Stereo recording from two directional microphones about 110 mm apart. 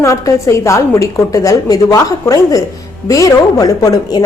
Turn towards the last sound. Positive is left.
turn(degrees=35)  # may be behind; listen again after turning